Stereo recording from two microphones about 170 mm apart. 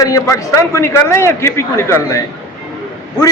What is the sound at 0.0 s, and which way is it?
A man's voice, 20° left (ahead or behind).